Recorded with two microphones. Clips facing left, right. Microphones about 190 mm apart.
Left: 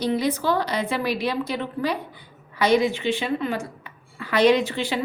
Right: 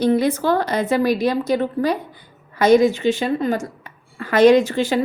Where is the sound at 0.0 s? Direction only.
50° right (ahead or behind).